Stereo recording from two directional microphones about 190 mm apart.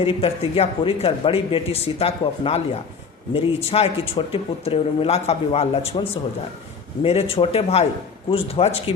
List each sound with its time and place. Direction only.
0.0 s speech: 30° left (ahead or behind)
7.0 s speech: 30° left (ahead or behind)